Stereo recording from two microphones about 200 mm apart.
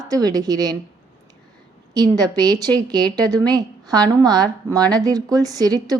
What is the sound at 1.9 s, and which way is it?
A woman's voice, 20° right (ahead or behind).